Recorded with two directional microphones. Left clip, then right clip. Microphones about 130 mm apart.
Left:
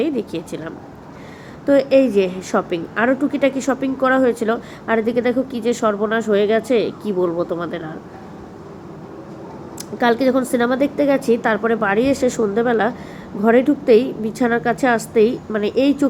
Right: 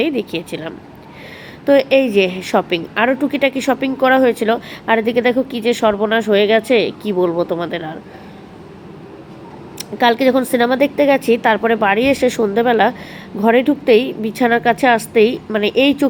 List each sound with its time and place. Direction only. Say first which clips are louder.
0.0 s a woman's voice: right 3 dB; 15° right (ahead or behind)
9.7 s a woman's voice: right 3 dB; 15° right (ahead or behind)